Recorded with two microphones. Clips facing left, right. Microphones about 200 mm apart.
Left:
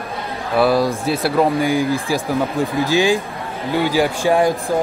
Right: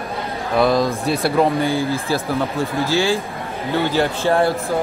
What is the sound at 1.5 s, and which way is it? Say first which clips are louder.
Speech: left 2 dB; 15° left (ahead or behind).